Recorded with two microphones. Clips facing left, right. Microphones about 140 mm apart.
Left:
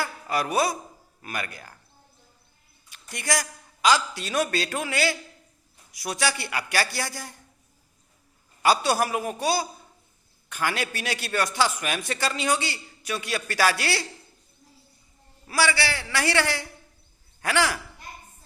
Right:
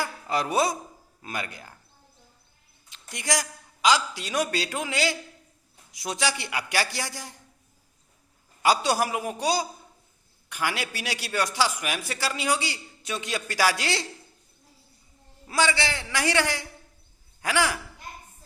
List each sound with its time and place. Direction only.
0.0 s a sound: 25° right (ahead or behind)
1.2 s speech: 20° right (ahead or behind)
2.9 s a man's voice: 15° right (ahead or behind)
8.6 s a man's voice: 15° right (ahead or behind)
15.4 s a man's voice: 20° right (ahead or behind)